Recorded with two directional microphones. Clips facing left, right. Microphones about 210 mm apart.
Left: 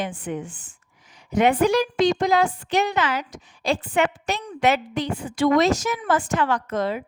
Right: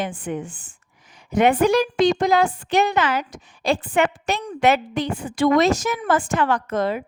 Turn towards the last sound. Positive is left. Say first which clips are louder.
# right 2 dB
turn(degrees=-50)  # may be behind; listen again after turning